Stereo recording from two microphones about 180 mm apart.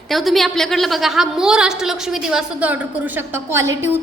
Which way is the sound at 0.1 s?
Centre (ahead or behind).